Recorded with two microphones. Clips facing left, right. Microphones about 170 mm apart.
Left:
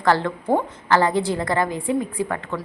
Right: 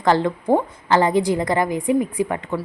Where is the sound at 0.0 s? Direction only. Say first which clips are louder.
Right 2 dB; 20° right (ahead or behind).